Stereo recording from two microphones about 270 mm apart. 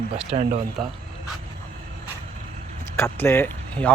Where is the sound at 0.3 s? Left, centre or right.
Right.